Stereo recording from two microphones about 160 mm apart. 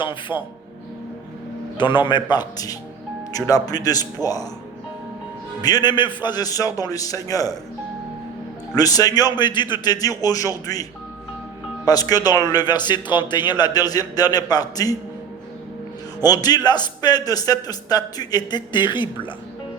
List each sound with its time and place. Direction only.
0.0 s a man's voice: 30° left (ahead or behind)
1.8 s a man's voice: 30° left (ahead or behind)
5.6 s a man's voice: 25° left (ahead or behind)
8.7 s a man's voice: 20° left (ahead or behind)
11.9 s a man's voice: 25° left (ahead or behind)
16.2 s a man's voice: 25° left (ahead or behind)